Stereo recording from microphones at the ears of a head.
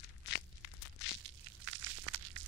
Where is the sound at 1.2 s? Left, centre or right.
Right.